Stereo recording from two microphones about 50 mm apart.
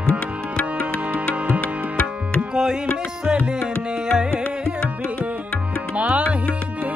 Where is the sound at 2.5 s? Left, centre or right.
Centre.